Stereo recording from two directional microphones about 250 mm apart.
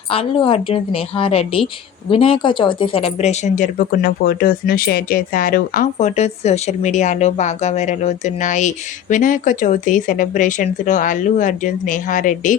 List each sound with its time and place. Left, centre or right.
0.1 s a woman's voice: left